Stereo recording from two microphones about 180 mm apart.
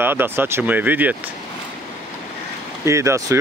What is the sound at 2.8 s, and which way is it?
Speech, 15° right (ahead or behind).